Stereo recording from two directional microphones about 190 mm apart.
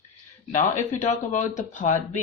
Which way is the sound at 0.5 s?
40° left (ahead or behind).